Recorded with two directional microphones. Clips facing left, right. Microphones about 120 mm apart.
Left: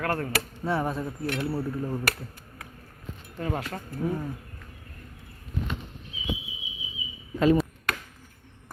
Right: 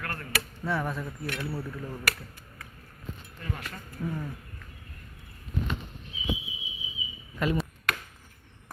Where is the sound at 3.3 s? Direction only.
60° left (ahead or behind).